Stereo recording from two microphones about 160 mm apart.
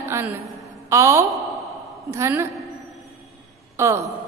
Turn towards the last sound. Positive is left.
turn(degrees=-20)  # may be behind; listen again after turning